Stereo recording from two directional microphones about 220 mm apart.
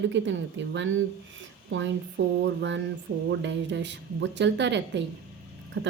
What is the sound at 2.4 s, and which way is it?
Speech, 55° right (ahead or behind).